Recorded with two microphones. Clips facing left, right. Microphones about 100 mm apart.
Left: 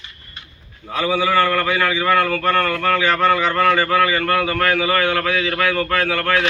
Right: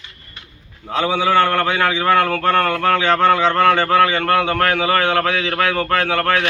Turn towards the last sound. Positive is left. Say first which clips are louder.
# right 2 dB
turn(degrees=-30)  # may be behind; listen again after turning